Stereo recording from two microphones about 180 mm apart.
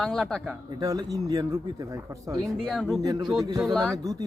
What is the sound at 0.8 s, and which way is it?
Speech, 20° right (ahead or behind).